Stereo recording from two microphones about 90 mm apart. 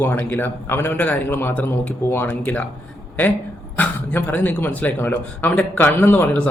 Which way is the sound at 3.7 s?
15° left (ahead or behind).